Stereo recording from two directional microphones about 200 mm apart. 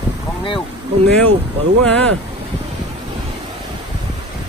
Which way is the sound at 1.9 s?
5° left (ahead or behind).